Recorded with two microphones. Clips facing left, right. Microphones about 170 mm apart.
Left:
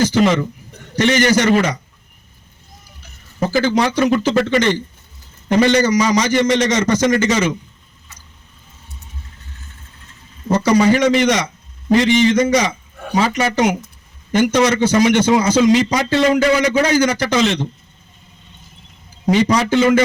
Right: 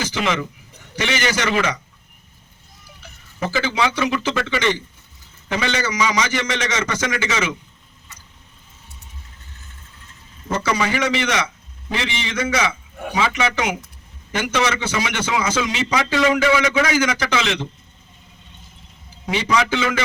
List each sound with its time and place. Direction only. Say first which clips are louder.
0.0 s a man's voice: left 8 dB; 40° left (ahead or behind)
3.4 s a man's voice: left 5 dB; 40° left (ahead or behind)
10.5 s a man's voice: left 8 dB; 40° left (ahead or behind)
19.2 s a man's voice: left 6 dB; 40° left (ahead or behind)